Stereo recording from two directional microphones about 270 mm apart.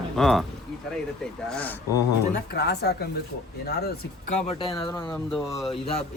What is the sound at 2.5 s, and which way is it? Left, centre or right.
Speech, left.